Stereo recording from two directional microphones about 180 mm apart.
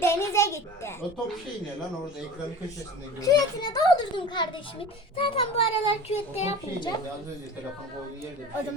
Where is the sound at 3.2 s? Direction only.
20° left (ahead or behind); by 6.8 s 35° left (ahead or behind).